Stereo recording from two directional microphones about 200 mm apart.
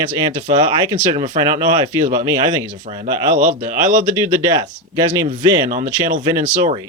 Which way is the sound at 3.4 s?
40° right (ahead or behind).